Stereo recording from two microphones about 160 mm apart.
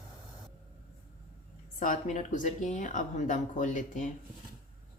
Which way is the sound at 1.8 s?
50° left (ahead or behind).